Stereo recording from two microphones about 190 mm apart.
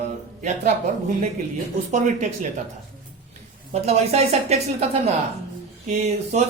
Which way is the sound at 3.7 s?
35° right (ahead or behind).